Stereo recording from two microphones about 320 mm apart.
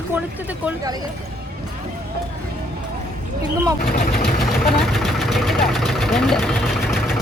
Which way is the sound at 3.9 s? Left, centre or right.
Left.